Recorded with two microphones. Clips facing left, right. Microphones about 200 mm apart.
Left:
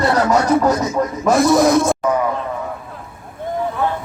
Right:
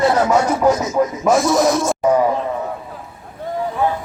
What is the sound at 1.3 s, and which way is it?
Music, 60° left (ahead or behind).